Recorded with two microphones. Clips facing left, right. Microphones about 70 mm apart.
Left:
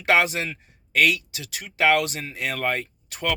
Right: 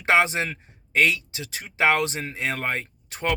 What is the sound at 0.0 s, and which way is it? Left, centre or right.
Speech, right.